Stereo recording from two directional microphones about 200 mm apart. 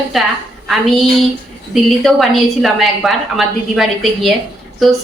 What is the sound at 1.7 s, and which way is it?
A woman's voice, centre (ahead or behind).